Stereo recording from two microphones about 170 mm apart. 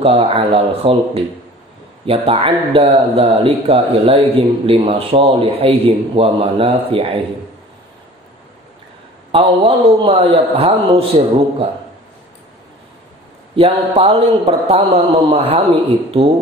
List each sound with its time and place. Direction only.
0.0 s a man's voice: 35° right (ahead or behind)
9.3 s a man's voice: 35° right (ahead or behind)
13.6 s a man's voice: 35° right (ahead or behind)